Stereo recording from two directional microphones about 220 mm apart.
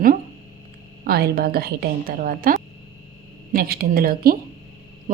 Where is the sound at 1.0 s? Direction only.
45° right (ahead or behind).